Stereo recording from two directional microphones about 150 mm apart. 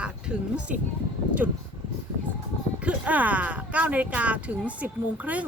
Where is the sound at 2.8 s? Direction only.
10° right (ahead or behind).